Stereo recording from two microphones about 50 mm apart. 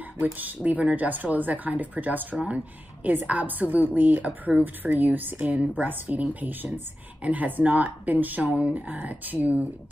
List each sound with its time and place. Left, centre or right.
0.2 s a woman's voice: right
3.1 s a woman's voice: right